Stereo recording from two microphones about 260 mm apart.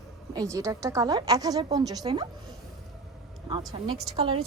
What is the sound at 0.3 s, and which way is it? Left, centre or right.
A woman's voice, centre.